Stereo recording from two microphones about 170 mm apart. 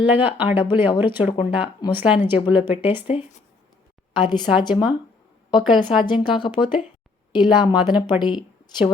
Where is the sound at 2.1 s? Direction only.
30° left (ahead or behind).